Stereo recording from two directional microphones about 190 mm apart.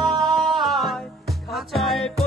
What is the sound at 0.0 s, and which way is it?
Music, centre (ahead or behind).